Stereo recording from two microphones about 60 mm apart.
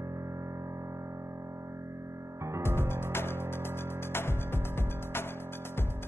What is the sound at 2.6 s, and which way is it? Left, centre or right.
Music, left.